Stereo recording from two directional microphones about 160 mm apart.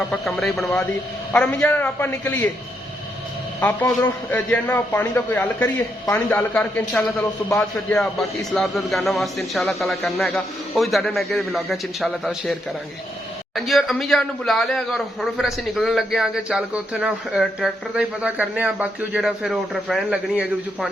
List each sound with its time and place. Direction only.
0.1 s a man's voice: centre (ahead or behind)
3.6 s a man's voice: 15° left (ahead or behind)
13.6 s speech: centre (ahead or behind)